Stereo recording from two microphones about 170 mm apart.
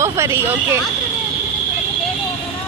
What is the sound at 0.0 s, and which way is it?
Speech, 15° right (ahead or behind).